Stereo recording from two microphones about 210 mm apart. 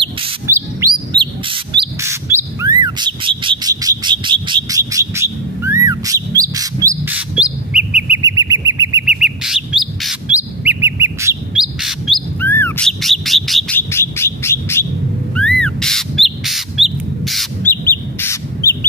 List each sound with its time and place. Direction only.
0.5 s bird: 15° right (ahead or behind)
8.2 s bird: 15° right (ahead or behind)
9.0 s bird: 5° right (ahead or behind)
11.6 s bird: centre (ahead or behind)
12.4 s bird: 10° left (ahead or behind)
17.8 s crow: 10° left (ahead or behind)